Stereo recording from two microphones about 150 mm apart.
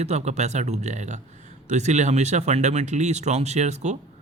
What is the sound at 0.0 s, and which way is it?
Speech, 45° right (ahead or behind).